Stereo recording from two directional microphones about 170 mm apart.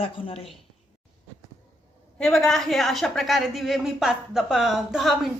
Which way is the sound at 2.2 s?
5° left (ahead or behind).